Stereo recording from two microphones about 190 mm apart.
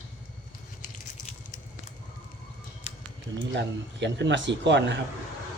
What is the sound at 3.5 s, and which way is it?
Speech, 65° right (ahead or behind).